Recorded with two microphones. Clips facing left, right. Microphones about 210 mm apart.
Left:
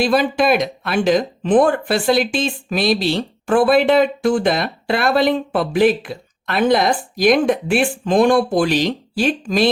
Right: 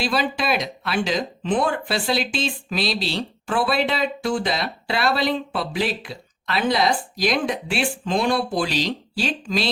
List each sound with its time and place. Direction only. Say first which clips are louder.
0.0 s speech: left 7 dB; 50° left (ahead or behind)